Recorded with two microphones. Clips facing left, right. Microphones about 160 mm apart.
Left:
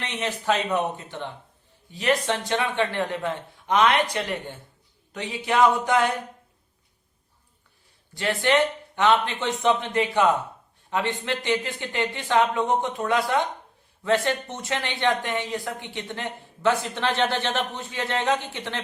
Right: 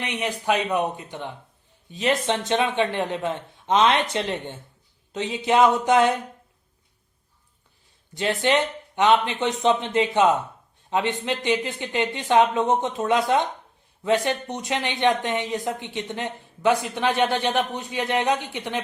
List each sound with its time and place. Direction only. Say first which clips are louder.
0.0 s speech: right 2 dB; 15° right (ahead or behind)
8.1 s speech: right 1 dB; 20° right (ahead or behind)